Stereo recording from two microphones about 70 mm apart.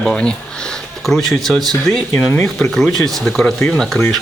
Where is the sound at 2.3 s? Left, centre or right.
Left; by 4.0 s centre.